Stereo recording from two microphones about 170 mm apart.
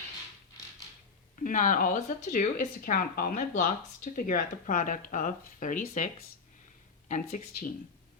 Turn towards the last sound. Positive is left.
turn(degrees=45)  # may be behind; listen again after turning